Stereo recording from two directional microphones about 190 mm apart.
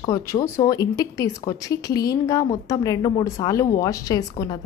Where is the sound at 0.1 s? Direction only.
15° left (ahead or behind).